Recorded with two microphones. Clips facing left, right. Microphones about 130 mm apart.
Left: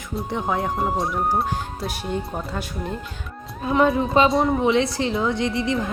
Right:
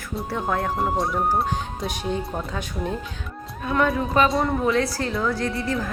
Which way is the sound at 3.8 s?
25° left (ahead or behind).